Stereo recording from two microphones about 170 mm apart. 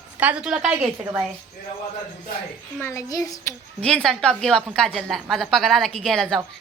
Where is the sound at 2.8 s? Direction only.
15° left (ahead or behind).